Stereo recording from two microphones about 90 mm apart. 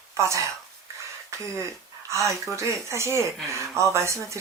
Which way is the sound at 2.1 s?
35° right (ahead or behind).